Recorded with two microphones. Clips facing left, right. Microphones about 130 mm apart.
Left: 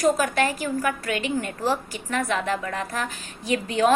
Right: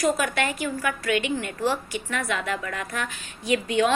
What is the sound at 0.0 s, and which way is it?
A woman's voice, 35° left (ahead or behind).